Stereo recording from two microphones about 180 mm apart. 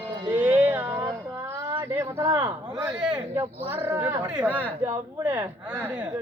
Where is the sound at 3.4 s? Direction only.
10° right (ahead or behind).